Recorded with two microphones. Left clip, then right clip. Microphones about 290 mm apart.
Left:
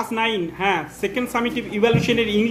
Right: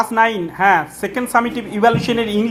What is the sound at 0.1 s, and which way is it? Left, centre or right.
Speech, right.